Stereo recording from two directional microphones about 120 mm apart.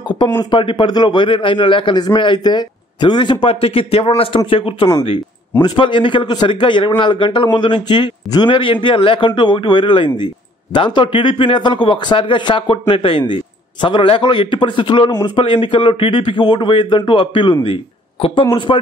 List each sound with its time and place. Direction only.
0.4 s a man's voice: 40° left (ahead or behind)